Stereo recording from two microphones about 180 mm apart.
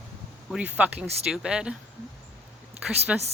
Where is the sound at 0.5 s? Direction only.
5° right (ahead or behind).